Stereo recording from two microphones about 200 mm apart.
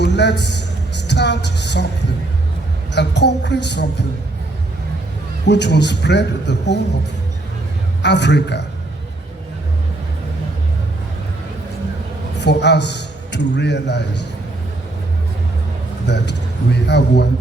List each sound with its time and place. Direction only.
0.0 s a woman's voice: 60° left (ahead or behind)
2.9 s a man's voice: 60° left (ahead or behind)
5.5 s a man's voice: 60° left (ahead or behind)
8.0 s a man's voice: 60° left (ahead or behind)
12.4 s a man's voice: 60° left (ahead or behind)
16.0 s a man's voice: 60° left (ahead or behind)